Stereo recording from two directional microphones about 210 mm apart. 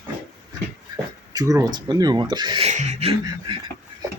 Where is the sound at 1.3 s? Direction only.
15° right (ahead or behind).